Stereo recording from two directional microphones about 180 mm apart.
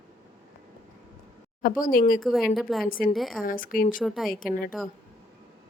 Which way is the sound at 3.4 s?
50° left (ahead or behind).